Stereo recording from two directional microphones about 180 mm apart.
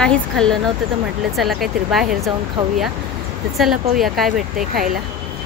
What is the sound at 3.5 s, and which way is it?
Speech, centre (ahead or behind).